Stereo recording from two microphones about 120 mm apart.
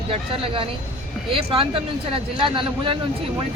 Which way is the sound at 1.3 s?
50° right (ahead or behind).